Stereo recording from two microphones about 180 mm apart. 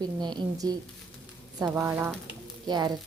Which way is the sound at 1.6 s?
10° right (ahead or behind).